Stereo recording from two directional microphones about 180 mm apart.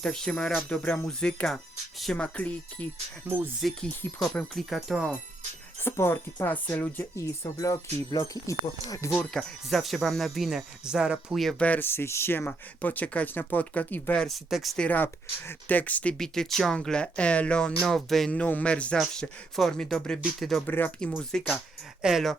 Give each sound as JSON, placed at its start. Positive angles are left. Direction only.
{"t": 0.0, "sound": "speech", "side_deg": 5}
{"t": 3.2, "sound": "speech", "side_deg": -10}
{"t": 3.6, "sound": "speech", "side_deg": 0}
{"t": 5.8, "sound": "speech", "side_deg": 10}
{"t": 9.3, "sound": "speech", "side_deg": 0}